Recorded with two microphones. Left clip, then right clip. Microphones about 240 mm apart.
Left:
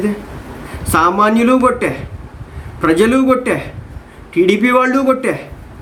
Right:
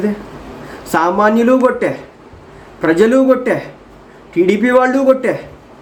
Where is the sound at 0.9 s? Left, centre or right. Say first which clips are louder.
Even; centre.